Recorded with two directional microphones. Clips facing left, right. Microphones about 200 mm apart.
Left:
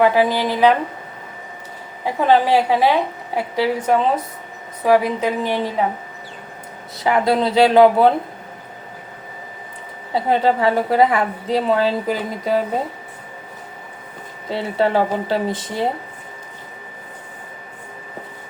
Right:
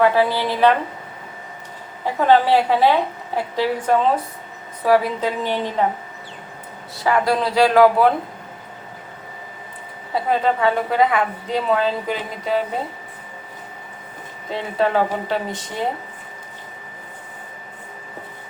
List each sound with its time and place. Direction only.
0.0 s a woman's voice: 15° left (ahead or behind)
2.2 s a woman's voice: 15° left (ahead or behind)
6.9 s speech: 20° left (ahead or behind)
10.2 s a woman's voice: 30° left (ahead or behind)
14.5 s a woman's voice: 30° left (ahead or behind)